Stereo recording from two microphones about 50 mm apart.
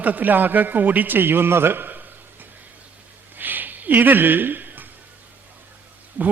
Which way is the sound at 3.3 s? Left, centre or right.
Right.